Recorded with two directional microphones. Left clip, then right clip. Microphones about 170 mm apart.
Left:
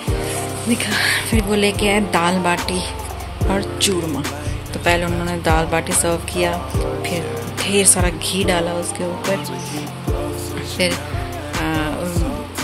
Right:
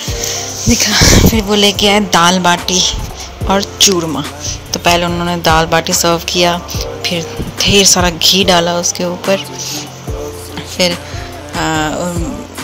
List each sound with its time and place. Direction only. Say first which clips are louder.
0.7 s a woman's voice: right 9 dB; 40° right (ahead or behind)
10.8 s speech: right 6 dB; 25° right (ahead or behind)
11.6 s music: right 8 dB; 25° right (ahead or behind)